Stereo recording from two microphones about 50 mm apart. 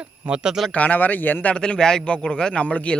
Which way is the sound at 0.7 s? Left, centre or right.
Left.